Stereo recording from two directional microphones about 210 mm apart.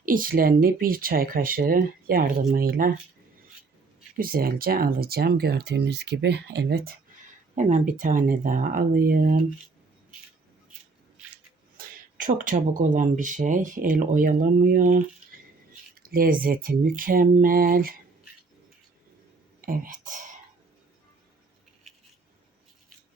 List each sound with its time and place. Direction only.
0.0 s speech: 40° right (ahead or behind)
4.2 s speech: 45° right (ahead or behind)
11.8 s speech: 40° right (ahead or behind)
19.6 s whispering: 40° right (ahead or behind)